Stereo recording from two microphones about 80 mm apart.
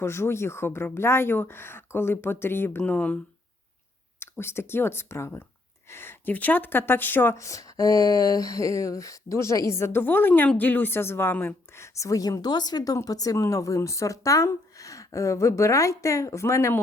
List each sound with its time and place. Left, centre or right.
0.0 s speech: left
2.8 s speech: centre
4.2 s speech: left
7.3 s speech: left